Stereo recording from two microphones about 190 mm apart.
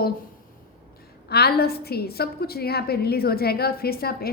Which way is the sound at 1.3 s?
55° left (ahead or behind).